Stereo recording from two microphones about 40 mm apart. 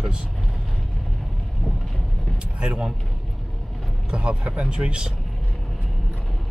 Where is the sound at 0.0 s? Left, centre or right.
Right.